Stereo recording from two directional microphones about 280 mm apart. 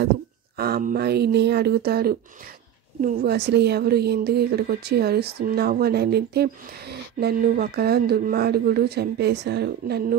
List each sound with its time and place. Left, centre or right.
0.6 s speech: right